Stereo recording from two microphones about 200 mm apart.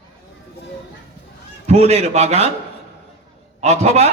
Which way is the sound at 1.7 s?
35° right (ahead or behind).